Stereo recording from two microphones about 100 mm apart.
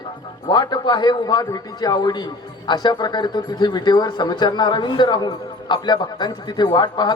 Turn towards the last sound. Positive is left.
turn(degrees=50)  # may be behind; listen again after turning